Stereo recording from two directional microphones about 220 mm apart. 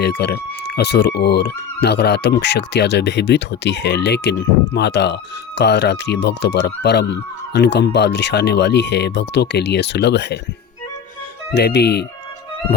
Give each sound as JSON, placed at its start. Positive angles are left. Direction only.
{"t": 0.0, "sound": "speech", "side_deg": 50}
{"t": 11.5, "sound": "speech", "side_deg": 50}